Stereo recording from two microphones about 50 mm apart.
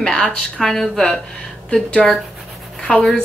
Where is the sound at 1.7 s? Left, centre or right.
Left.